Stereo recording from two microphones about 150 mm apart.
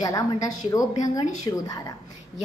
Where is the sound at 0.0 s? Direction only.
25° left (ahead or behind).